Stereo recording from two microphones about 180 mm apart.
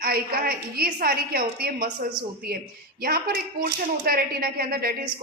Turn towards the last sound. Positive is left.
turn(degrees=-60)  # may be behind; listen again after turning